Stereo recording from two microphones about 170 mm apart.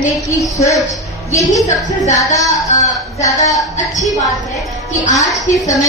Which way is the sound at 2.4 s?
20° left (ahead or behind).